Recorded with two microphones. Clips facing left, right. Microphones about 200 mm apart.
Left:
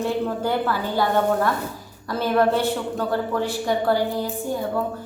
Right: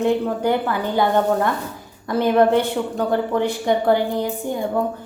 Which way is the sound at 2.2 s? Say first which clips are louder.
Right 3 dB; 15° right (ahead or behind).